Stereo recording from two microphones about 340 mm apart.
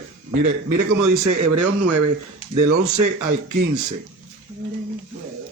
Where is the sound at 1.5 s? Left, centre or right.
Right.